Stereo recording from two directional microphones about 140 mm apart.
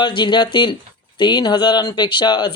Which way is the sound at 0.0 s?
35° left (ahead or behind).